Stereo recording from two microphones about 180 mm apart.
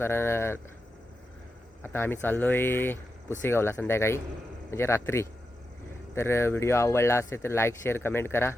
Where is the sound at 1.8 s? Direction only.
10° left (ahead or behind).